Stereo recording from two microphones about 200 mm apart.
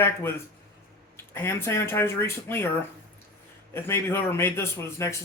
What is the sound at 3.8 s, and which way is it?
A man's voice, 10° left (ahead or behind).